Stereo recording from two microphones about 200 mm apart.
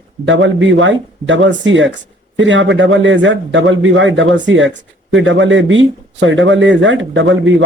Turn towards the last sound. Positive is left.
turn(degrees=-70)  # may be behind; listen again after turning